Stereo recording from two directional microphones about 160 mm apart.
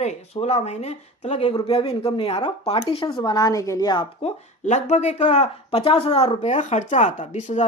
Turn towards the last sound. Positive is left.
turn(degrees=45)  # may be behind; listen again after turning